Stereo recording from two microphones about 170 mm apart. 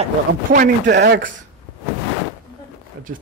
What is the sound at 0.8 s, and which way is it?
Speech, 85° right.